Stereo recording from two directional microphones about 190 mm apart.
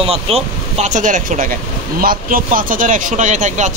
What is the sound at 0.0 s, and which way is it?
Speech, 30° right (ahead or behind).